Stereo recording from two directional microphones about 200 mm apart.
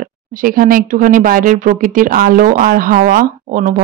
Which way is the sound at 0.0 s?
45° right (ahead or behind).